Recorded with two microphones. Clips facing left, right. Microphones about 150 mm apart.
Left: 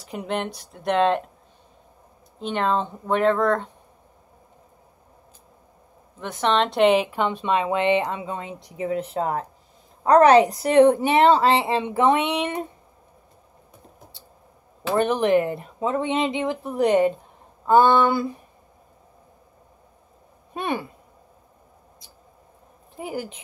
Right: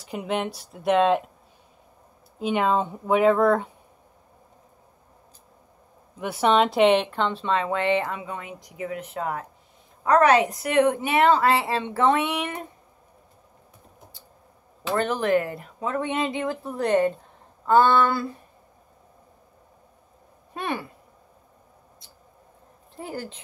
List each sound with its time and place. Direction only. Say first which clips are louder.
0.0 s speech: even; centre (ahead or behind)
2.3 s speech: right 1 dB; 5° right (ahead or behind)
6.1 s speech: right 2 dB; 10° right (ahead or behind); by 12.6 s 20° left (ahead or behind)
14.9 s speech: left 3 dB; 15° left (ahead or behind)
17.6 s a sound: left 2 dB; 15° left (ahead or behind)
20.5 s speech: left 3 dB; 20° left (ahead or behind)
22.9 s a sound: left 3 dB; 15° left (ahead or behind)